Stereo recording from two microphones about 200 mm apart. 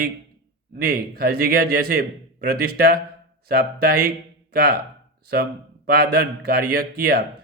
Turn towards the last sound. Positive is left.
turn(degrees=-50)  # may be behind; listen again after turning